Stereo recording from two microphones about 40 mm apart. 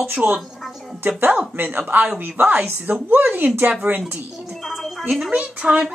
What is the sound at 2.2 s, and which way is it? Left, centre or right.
Speech, right.